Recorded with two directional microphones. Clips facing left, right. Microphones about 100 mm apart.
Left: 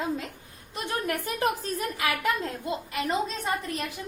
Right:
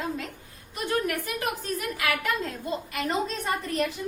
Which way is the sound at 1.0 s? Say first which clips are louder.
Left 2 dB; 30° left (ahead or behind).